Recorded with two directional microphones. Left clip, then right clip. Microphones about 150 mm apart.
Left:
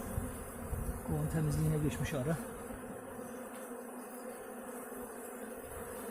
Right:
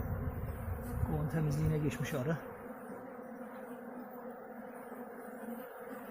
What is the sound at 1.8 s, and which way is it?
Speech, 5° left (ahead or behind).